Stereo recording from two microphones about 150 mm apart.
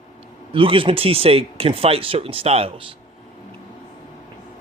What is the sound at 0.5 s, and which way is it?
Speech, 35° right (ahead or behind).